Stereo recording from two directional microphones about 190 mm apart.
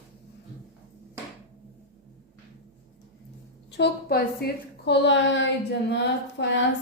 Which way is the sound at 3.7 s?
60° left (ahead or behind).